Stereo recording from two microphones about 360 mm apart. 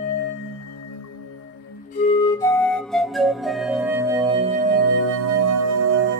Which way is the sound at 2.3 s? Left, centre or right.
Centre.